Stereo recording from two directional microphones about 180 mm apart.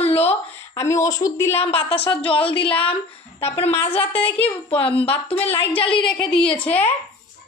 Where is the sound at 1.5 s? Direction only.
35° left (ahead or behind).